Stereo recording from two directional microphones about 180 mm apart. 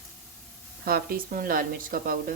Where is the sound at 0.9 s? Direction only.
55° right (ahead or behind).